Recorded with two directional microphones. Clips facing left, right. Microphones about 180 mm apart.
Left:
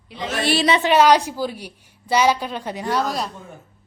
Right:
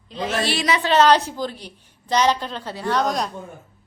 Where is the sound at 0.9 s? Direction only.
10° left (ahead or behind).